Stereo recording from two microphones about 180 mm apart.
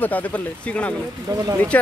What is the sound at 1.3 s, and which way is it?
Speech, 20° right (ahead or behind).